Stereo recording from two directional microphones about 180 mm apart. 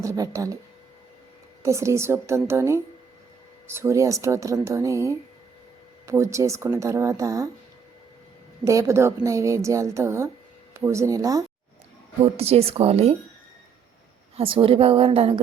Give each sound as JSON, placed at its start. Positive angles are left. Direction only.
{"t": 0.0, "sound": "a woman's voice", "side_deg": -15}
{"t": 1.6, "sound": "a woman's voice", "side_deg": -15}
{"t": 8.6, "sound": "a woman's voice", "side_deg": -15}
{"t": 12.2, "sound": "a woman's voice", "side_deg": -35}
{"t": 14.3, "sound": "a woman's voice", "side_deg": -30}